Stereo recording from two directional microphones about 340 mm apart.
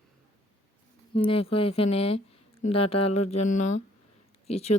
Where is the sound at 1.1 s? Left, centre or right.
Centre.